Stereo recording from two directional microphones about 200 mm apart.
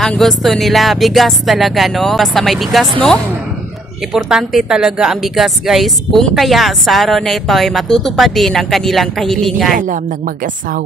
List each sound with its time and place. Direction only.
0.0 s a woman's voice: centre (ahead or behind)
4.1 s a woman's voice: centre (ahead or behind)
9.8 s a woman's voice: 40° right (ahead or behind)